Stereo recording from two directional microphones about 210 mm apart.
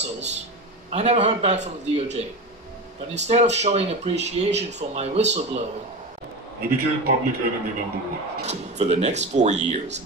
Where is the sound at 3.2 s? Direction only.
30° right (ahead or behind).